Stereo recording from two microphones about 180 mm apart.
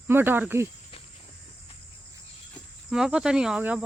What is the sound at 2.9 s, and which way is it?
Cricket, 5° right (ahead or behind).